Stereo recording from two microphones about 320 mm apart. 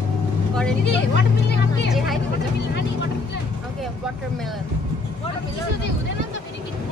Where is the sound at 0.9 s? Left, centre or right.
Left.